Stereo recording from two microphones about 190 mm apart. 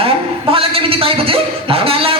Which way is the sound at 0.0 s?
30° right (ahead or behind).